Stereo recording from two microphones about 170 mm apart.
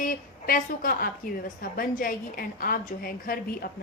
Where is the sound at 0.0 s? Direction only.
55° left (ahead or behind).